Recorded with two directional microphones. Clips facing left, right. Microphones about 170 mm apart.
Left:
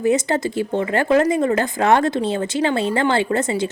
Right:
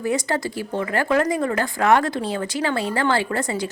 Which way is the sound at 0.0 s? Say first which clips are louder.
Left 5 dB; 20° left (ahead or behind).